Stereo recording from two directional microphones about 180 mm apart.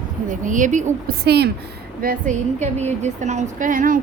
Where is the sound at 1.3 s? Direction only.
65° right (ahead or behind).